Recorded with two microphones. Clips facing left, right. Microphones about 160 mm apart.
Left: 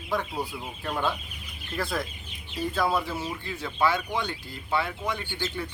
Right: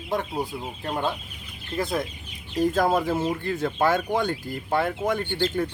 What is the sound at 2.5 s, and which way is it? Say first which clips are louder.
Speech: right 5 dB; 45° right (ahead or behind).